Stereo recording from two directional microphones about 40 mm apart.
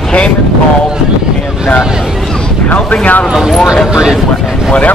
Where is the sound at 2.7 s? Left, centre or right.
Left.